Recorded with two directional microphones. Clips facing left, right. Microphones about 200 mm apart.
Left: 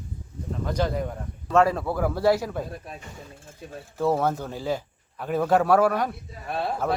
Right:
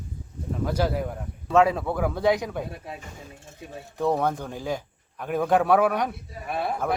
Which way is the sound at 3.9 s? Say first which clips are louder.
Left 1 dB; 5° left (ahead or behind).